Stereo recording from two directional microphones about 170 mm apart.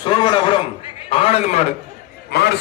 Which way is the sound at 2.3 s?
70° left (ahead or behind).